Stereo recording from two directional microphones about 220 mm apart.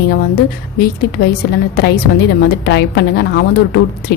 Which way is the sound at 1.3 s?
45° left (ahead or behind).